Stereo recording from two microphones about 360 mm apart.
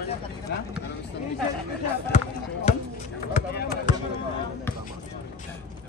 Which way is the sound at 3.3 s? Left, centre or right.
Left.